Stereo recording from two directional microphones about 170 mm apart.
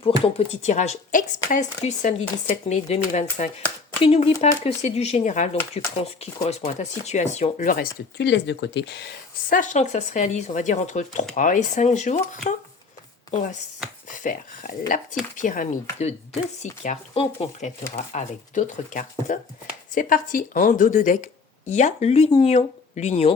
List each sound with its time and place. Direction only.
0.0 s speech: 40° left (ahead or behind)
8.2 s speech: 90° left
9.6 s speech: 45° left (ahead or behind)
17.9 s speech: 45° left (ahead or behind)